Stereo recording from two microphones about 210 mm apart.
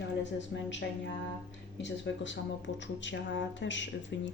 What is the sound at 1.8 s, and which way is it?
Speech, 60° left (ahead or behind).